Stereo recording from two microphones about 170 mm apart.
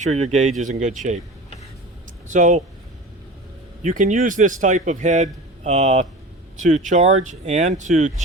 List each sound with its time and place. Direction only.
0.0 s a man's voice: 40° right (ahead or behind)
2.3 s a man's voice: 45° right (ahead or behind)
3.8 s a man's voice: 50° right (ahead or behind)